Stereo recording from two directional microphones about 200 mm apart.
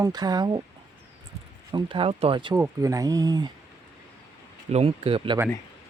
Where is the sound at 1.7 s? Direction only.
25° right (ahead or behind).